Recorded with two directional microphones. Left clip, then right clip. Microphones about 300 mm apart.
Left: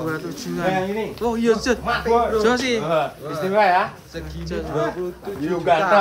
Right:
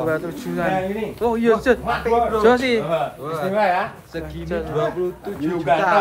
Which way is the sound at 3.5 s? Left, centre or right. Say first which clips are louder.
Left 3 dB; left.